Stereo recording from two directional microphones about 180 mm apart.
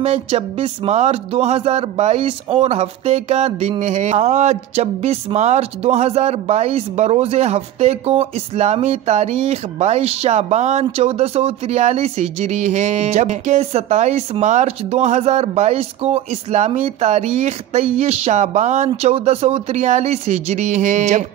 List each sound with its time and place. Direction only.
0.0 s speech: 35° right (ahead or behind)